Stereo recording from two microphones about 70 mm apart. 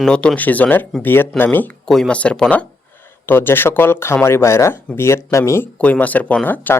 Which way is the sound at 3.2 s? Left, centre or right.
Left.